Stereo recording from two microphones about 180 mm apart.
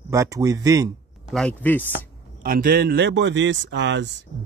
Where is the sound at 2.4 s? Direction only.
55° right (ahead or behind).